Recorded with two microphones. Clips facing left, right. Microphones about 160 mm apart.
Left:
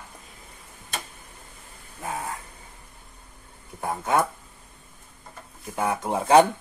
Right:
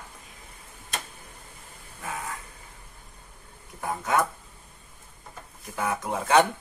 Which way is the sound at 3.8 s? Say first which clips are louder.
Left 2 dB; 25° left (ahead or behind).